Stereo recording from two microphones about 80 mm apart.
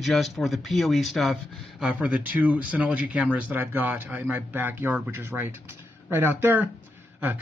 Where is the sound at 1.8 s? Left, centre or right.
Centre.